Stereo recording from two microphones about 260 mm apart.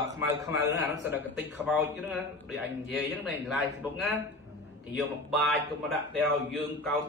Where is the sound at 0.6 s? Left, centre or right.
Left.